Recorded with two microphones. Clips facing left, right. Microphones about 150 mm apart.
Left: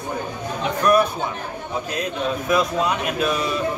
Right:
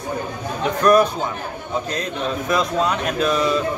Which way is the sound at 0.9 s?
40° right (ahead or behind).